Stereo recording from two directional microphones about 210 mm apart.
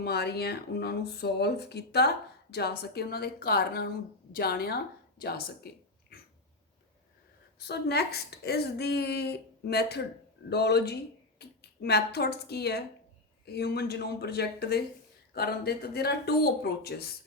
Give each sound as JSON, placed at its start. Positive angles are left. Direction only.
{"t": 0.0, "sound": "speech", "side_deg": 50}
{"t": 7.6, "sound": "speech", "side_deg": 50}